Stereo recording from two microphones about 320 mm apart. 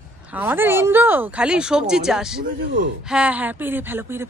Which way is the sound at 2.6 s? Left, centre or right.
Right.